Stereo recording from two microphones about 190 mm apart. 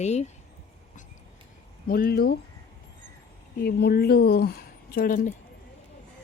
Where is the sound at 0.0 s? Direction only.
35° left (ahead or behind).